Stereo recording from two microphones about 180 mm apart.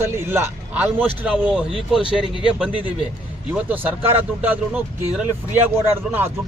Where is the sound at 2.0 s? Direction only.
30° left (ahead or behind).